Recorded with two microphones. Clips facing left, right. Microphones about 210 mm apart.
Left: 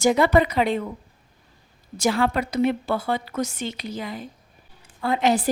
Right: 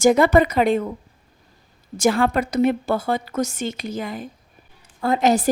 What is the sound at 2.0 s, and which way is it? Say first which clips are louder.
A woman's voice: right 3 dB; 50° right (ahead or behind).